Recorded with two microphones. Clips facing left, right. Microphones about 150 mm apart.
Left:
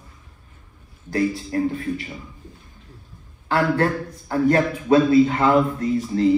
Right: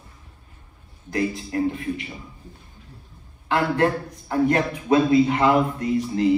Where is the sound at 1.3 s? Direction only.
35° left (ahead or behind).